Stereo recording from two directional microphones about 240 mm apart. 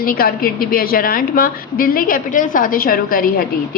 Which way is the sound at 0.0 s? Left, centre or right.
Left.